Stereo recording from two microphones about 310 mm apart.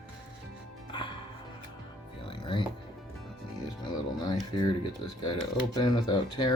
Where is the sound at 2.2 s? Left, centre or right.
Centre.